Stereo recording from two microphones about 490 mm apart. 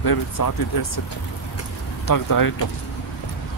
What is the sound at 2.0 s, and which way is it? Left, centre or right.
Speech, left.